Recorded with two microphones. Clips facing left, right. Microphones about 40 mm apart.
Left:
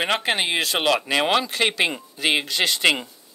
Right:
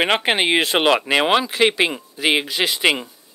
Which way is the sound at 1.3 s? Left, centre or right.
Centre.